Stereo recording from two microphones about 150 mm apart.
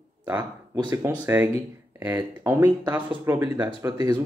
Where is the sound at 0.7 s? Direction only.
20° right (ahead or behind).